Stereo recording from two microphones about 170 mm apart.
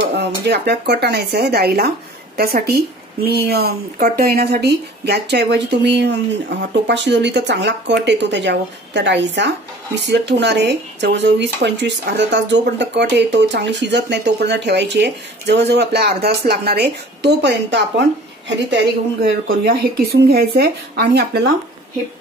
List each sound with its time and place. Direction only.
0.1 s a woman's voice: 85° right